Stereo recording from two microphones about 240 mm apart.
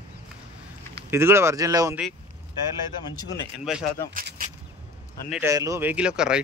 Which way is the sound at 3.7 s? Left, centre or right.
Centre.